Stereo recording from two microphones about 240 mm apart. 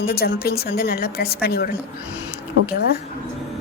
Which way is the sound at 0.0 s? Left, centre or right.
Left.